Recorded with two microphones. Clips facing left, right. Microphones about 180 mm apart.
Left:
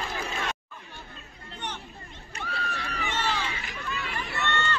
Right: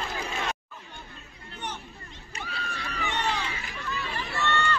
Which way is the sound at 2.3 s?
60° left (ahead or behind).